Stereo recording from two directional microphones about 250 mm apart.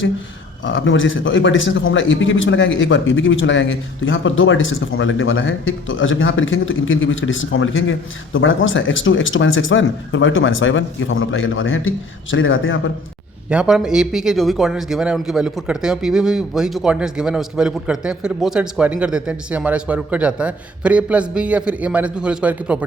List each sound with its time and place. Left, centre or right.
0.6 s a man's voice: left
13.5 s a man's voice: centre